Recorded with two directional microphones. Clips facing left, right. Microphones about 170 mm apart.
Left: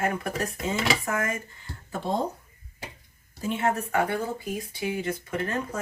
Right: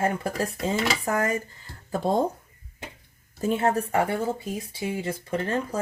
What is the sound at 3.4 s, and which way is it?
Speech, 35° right (ahead or behind).